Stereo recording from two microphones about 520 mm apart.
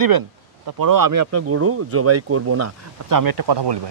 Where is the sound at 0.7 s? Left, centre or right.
Right.